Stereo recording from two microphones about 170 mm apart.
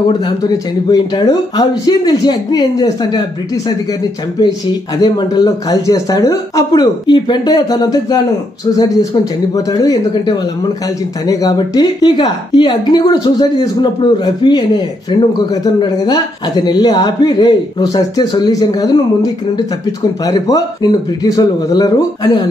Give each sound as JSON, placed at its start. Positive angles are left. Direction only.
{"t": 0.4, "sound": "a man's voice", "side_deg": 25}
{"t": 4.4, "sound": "a man's voice", "side_deg": 25}